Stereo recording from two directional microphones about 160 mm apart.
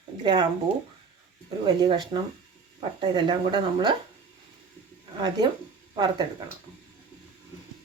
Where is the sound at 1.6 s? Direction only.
30° right (ahead or behind).